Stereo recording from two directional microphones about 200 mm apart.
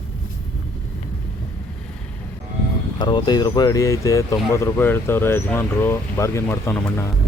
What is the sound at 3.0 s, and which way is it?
Speech, 20° left (ahead or behind).